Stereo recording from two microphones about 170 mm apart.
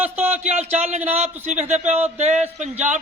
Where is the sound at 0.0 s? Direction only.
10° right (ahead or behind).